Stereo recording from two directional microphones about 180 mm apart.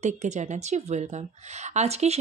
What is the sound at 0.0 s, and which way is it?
A woman's voice, 40° right (ahead or behind).